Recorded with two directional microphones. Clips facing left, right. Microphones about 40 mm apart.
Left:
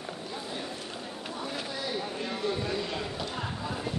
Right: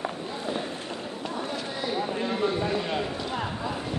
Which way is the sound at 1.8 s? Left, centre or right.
Centre.